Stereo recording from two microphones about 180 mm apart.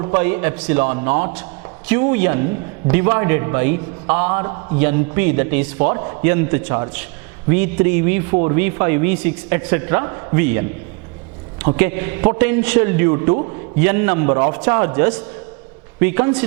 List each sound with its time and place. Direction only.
0.0 s a man's voice: 15° right (ahead or behind)
4.4 s a man's voice: 25° right (ahead or behind)
4.8 s a man's voice: 15° right (ahead or behind)
11.8 s a man's voice: 15° right (ahead or behind)